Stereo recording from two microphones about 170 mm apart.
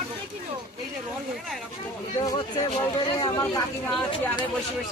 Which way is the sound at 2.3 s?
25° left (ahead or behind).